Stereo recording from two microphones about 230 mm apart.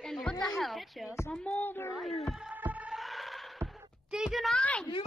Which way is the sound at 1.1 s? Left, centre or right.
Centre.